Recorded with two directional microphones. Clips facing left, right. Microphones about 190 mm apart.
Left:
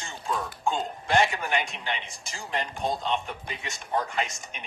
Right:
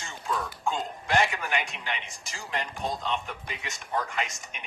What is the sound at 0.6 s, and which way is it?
A man's voice, 30° left (ahead or behind).